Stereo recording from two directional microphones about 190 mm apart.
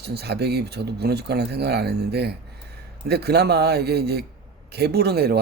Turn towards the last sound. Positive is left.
turn(degrees=-60)  # may be behind; listen again after turning